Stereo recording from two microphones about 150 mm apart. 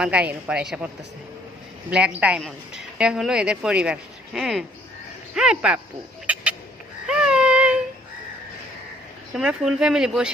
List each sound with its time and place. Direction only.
0.0 s a woman's voice: 10° right (ahead or behind)
1.9 s a woman's voice: 5° right (ahead or behind)
6.2 s a sound: 10° right (ahead or behind)
7.1 s baby cry: 5° right (ahead or behind)
9.3 s speech: 5° right (ahead or behind)